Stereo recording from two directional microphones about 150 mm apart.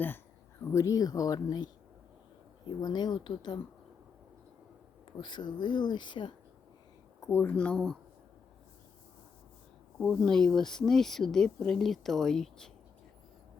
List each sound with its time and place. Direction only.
0.6 s speech: 20° left (ahead or behind)
5.1 s speech: 30° left (ahead or behind)
7.2 s speech: 15° left (ahead or behind)
10.0 s speech: 5° left (ahead or behind)